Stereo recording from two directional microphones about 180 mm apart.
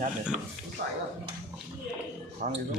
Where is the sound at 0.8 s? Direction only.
70° right (ahead or behind).